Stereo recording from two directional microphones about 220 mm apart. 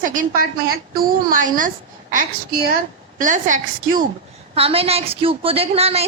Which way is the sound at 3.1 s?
35° right (ahead or behind).